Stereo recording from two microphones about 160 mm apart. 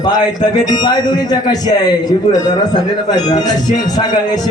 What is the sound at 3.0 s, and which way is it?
Speech, 25° left (ahead or behind).